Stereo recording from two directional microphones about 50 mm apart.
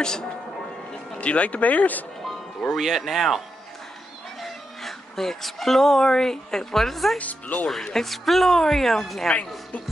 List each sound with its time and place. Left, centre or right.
0.0 s speech: centre
1.1 s speech: left
2.6 s speech: centre
7.2 s speech: left
7.6 s speech: centre